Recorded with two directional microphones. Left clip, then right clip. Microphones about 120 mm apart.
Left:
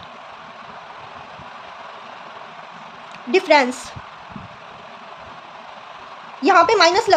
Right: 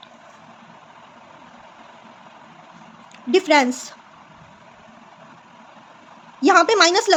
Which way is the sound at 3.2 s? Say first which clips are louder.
Left 1 dB; 50° right (ahead or behind).